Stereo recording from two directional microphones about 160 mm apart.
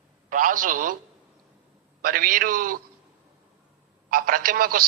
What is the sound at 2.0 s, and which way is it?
Speech, 65° right (ahead or behind).